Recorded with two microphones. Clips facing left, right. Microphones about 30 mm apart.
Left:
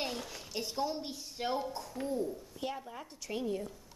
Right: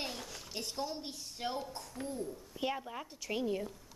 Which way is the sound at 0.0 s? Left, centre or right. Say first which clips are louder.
Left 3 dB; centre.